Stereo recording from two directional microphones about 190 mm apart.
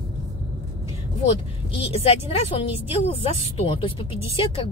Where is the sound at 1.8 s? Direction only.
30° left (ahead or behind).